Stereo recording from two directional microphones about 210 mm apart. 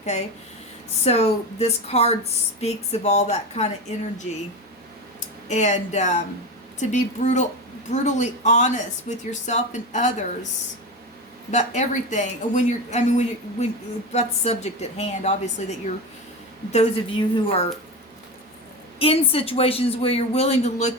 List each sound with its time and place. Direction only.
0.0 s a man's voice: 35° left (ahead or behind)
5.5 s speech: 35° left (ahead or behind)
11.5 s speech: 35° left (ahead or behind)
16.7 s a man's voice: 30° left (ahead or behind)
18.9 s a man's voice: 25° left (ahead or behind)